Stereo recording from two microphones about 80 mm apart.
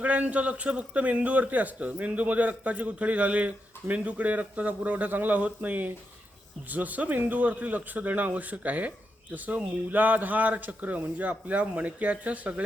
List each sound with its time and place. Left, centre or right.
0.0 s a man's voice: centre